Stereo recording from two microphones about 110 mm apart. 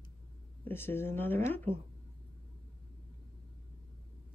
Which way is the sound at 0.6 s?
20° left (ahead or behind).